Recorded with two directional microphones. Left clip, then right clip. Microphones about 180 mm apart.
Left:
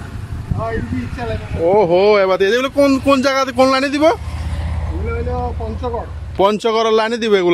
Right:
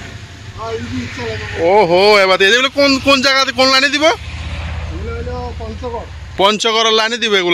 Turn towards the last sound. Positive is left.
turn(degrees=10)  # may be behind; listen again after turning